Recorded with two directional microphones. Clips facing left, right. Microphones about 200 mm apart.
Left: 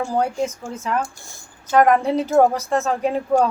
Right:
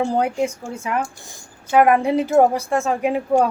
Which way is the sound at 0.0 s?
20° right (ahead or behind).